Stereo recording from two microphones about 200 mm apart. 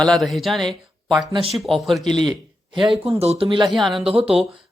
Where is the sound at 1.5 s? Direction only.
Centre (ahead or behind).